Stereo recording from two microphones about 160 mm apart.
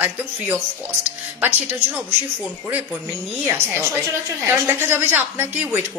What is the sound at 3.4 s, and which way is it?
A woman's voice, 15° right (ahead or behind).